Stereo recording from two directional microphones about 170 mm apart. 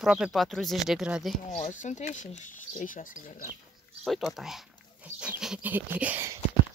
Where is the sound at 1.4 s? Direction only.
40° left (ahead or behind).